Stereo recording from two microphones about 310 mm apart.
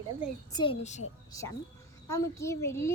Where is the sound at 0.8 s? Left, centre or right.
Left.